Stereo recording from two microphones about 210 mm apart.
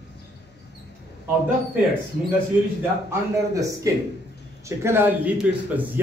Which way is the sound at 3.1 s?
15° right (ahead or behind).